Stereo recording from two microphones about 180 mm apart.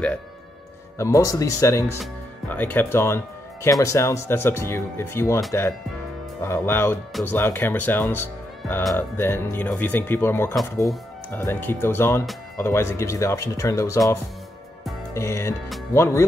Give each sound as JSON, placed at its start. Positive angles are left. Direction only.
{"t": 0.9, "sound": "speech", "side_deg": 15}
{"t": 6.4, "sound": "speech", "side_deg": 15}
{"t": 15.1, "sound": "speech", "side_deg": 15}